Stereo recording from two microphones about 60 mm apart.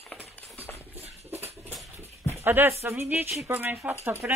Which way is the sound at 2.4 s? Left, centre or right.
Right.